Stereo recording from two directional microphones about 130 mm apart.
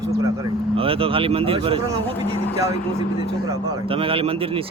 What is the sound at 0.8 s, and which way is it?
Speech, 45° right (ahead or behind).